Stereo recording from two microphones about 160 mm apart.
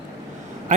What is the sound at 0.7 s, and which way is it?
Speech, 50° right (ahead or behind).